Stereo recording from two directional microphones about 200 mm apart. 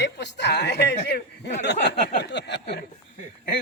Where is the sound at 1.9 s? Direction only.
60° left (ahead or behind).